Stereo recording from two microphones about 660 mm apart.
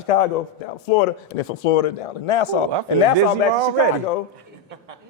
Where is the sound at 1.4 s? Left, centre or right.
Left.